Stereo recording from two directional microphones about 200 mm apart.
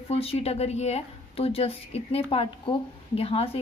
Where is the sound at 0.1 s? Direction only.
30° left (ahead or behind).